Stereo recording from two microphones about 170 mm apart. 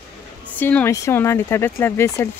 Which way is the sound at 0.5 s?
10° left (ahead or behind).